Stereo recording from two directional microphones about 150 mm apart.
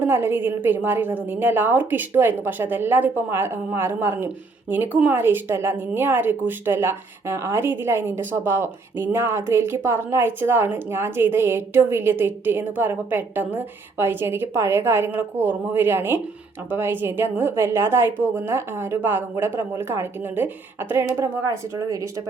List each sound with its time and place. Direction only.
0.0 s speech: 15° right (ahead or behind)